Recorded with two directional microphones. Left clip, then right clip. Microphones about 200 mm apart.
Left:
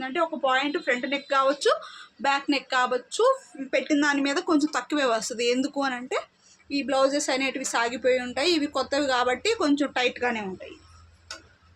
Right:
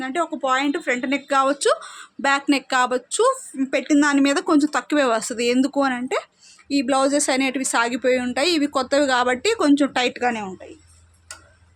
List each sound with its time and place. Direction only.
0.0 s speech: 40° right (ahead or behind); by 10.4 s 60° right (ahead or behind)